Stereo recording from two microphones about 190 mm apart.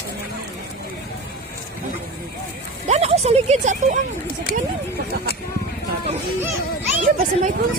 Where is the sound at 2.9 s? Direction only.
35° right (ahead or behind).